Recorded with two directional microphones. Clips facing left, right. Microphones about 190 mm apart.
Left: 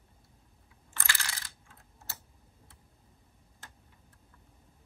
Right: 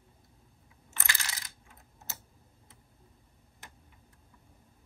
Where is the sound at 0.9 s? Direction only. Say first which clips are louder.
Left 1 dB; 20° right (ahead or behind).